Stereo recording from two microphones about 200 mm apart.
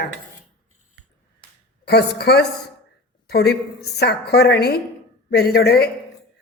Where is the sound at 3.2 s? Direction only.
55° left (ahead or behind).